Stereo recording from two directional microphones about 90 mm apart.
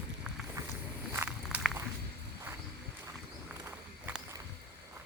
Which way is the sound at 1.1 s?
25° right (ahead or behind).